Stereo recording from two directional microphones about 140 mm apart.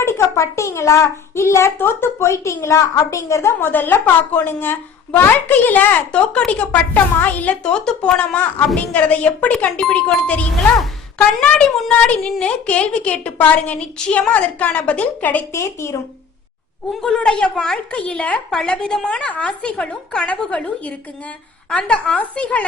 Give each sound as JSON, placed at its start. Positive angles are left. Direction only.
{"t": 0.0, "sound": "a child's voice", "side_deg": 20}
{"t": 16.9, "sound": "a child's voice", "side_deg": 5}